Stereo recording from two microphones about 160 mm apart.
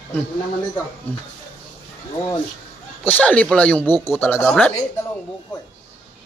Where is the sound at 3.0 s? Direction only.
10° left (ahead or behind).